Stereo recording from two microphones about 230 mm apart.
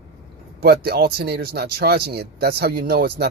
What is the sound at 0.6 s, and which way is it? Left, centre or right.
Speech, right.